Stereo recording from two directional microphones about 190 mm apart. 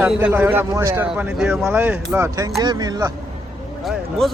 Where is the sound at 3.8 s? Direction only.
Centre (ahead or behind).